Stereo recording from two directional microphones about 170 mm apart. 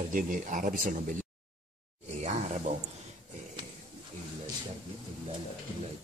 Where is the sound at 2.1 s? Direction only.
40° right (ahead or behind).